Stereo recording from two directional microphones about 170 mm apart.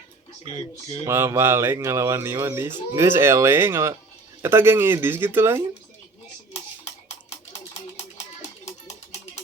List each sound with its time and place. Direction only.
1.0 s speech: 15° right (ahead or behind)